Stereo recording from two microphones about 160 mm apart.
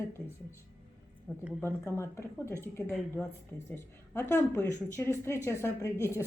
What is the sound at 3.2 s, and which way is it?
Speech, centre (ahead or behind).